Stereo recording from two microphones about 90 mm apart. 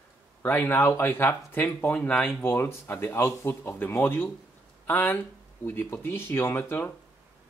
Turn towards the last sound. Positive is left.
turn(degrees=25)  # may be behind; listen again after turning